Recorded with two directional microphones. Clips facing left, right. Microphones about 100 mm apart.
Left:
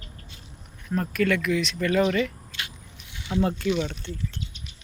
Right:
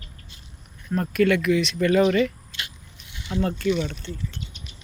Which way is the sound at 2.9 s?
10° left (ahead or behind).